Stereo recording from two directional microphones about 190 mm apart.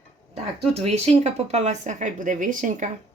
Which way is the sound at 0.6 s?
30° right (ahead or behind).